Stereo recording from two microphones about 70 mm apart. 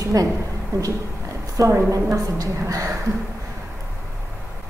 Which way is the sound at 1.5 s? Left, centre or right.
Right.